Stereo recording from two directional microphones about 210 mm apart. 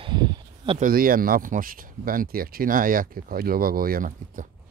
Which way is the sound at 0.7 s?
40° right (ahead or behind).